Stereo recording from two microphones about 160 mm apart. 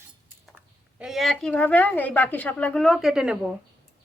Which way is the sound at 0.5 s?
5° right (ahead or behind).